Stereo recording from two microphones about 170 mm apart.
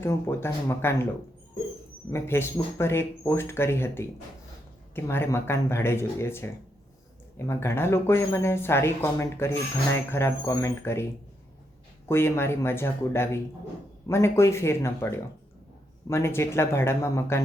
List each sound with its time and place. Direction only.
0.0 s speech: 15° left (ahead or behind)
2.0 s speech: 15° left (ahead or behind)
12.0 s speech: 15° left (ahead or behind)